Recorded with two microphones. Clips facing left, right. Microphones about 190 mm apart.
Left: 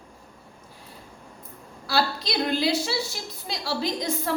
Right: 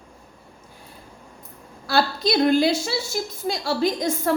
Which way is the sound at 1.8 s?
50° right (ahead or behind).